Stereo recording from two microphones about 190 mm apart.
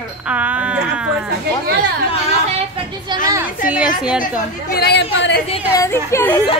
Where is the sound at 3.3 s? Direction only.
10° right (ahead or behind).